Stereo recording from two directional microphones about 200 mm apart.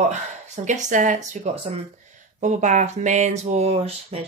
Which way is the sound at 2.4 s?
35° right (ahead or behind).